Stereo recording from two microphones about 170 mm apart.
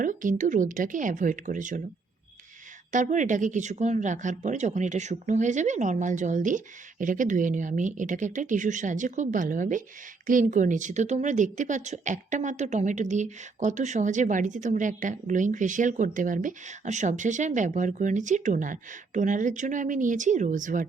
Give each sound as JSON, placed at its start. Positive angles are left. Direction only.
{"t": 0.0, "sound": "a woman's voice", "side_deg": -50}
{"t": 2.9, "sound": "a woman's voice", "side_deg": -50}